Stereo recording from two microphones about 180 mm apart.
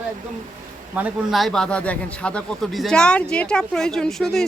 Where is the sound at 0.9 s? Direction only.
5° right (ahead or behind).